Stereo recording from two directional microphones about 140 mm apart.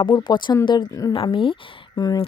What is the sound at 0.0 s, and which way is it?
A woman's voice, 30° left (ahead or behind).